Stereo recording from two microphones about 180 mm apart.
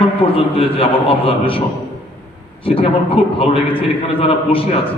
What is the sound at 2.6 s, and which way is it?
A man's voice, 30° left (ahead or behind).